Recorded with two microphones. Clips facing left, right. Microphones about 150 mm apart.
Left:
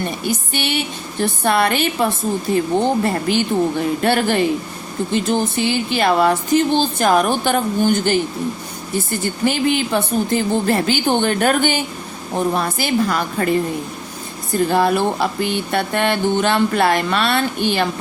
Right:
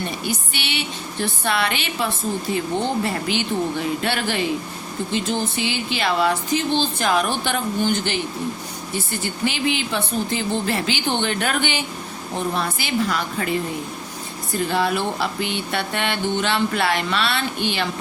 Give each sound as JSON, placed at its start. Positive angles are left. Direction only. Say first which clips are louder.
{"t": 0.3, "sound": "music", "louder": "left 6 dB", "side_deg": 45}
{"t": 9.2, "sound": "music", "louder": "left 5 dB", "side_deg": 45}
{"t": 14.7, "sound": "music", "louder": "left 5 dB", "side_deg": 45}